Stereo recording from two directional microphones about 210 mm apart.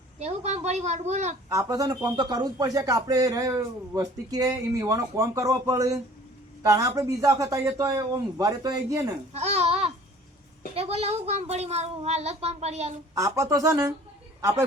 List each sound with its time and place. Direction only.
0.2 s speech: 30° right (ahead or behind)
1.5 s a man's voice: 15° right (ahead or behind)
9.3 s a child's voice: 30° right (ahead or behind)
13.1 s a man's voice: 15° right (ahead or behind)